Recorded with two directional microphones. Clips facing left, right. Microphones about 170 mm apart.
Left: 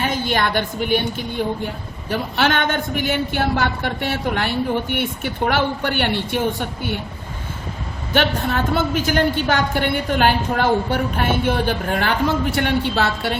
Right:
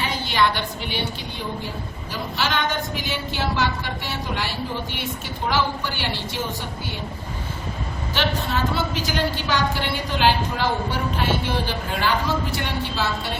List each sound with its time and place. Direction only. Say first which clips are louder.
0.0 s a woman's voice: left 2 dB; 50° left (ahead or behind)
8.1 s a woman's voice: left 5 dB; 55° left (ahead or behind)